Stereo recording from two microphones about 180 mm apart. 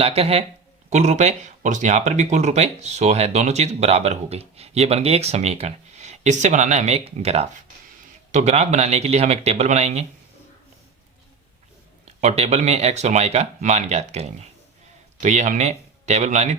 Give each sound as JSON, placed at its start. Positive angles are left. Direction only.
{"t": 0.0, "sound": "speech", "side_deg": -35}
{"t": 12.2, "sound": "speech", "side_deg": -40}